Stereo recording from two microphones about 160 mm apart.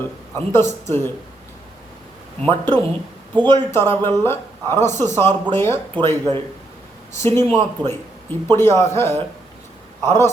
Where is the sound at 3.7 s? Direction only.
15° left (ahead or behind).